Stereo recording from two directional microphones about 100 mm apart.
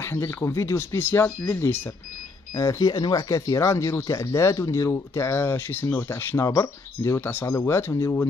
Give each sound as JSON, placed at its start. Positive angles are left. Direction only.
{"t": 0.0, "sound": "speech", "side_deg": 25}